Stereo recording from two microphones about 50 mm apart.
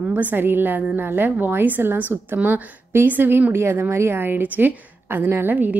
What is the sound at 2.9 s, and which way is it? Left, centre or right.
Speech, right.